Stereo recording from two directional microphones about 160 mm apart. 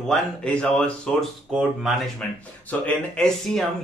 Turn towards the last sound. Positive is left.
turn(degrees=0)  # may be behind; listen again after turning